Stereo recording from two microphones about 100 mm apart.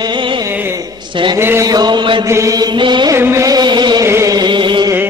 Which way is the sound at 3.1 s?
30° right (ahead or behind).